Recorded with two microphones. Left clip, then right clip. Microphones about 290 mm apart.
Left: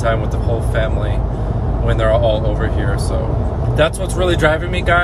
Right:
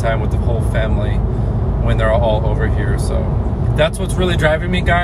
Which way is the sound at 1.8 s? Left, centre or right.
Centre.